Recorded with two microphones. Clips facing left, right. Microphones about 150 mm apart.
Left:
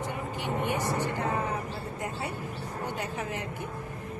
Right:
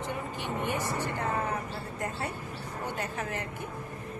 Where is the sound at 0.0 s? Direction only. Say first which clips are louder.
Left 1 dB; 15° left (ahead or behind).